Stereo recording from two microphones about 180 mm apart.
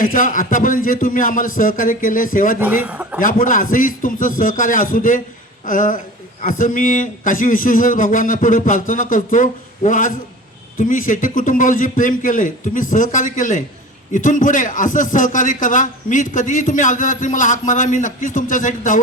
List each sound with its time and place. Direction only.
0.0 s a man's voice: 50° left (ahead or behind)
2.8 s a man's voice: 5° right (ahead or behind)
3.2 s a man's voice: 50° left (ahead or behind)